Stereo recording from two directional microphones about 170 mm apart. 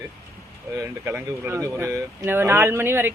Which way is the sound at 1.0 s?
15° right (ahead or behind).